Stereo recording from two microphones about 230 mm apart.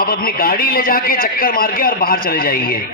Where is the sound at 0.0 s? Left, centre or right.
Left.